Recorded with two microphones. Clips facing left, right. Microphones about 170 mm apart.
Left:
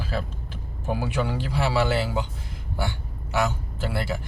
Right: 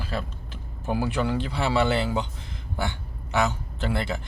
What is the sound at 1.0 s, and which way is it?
A man's voice, 10° left (ahead or behind).